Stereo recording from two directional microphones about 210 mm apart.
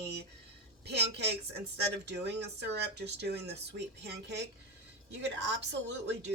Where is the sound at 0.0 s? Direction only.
50° right (ahead or behind).